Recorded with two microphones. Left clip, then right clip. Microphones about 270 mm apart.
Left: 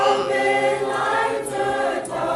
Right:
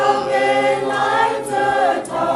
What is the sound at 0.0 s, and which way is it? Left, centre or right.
Choir, left.